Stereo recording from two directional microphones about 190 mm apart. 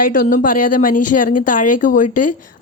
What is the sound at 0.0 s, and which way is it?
Speech, 45° left (ahead or behind).